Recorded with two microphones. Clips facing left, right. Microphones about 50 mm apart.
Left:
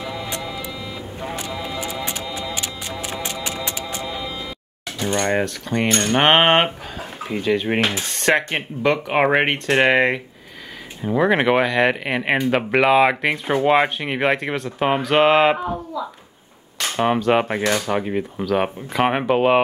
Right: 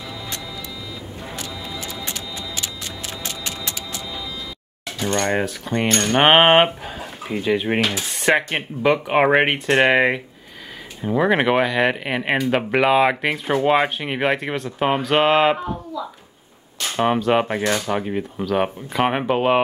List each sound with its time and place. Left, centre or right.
1.2 s music: left
4.0 s a sound: left
4.9 s speech: centre
15.5 s speech: centre
16.9 s speech: centre